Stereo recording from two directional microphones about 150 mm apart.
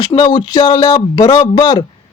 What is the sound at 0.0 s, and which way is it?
Speech, 30° left (ahead or behind).